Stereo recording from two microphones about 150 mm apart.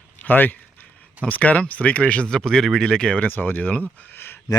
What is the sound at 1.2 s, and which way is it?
Speech, 10° left (ahead or behind).